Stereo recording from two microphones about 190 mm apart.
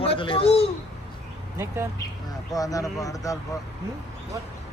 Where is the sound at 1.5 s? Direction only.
15° right (ahead or behind).